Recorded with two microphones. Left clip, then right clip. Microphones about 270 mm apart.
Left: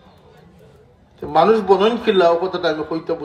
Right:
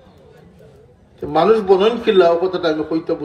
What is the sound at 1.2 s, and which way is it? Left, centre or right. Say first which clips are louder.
A man's voice: even; left.